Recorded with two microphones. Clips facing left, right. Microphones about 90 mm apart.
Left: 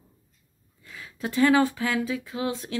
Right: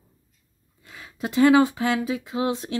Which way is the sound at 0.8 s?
20° right (ahead or behind).